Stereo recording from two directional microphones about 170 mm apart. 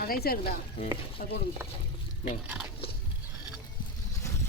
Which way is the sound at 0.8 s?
30° left (ahead or behind).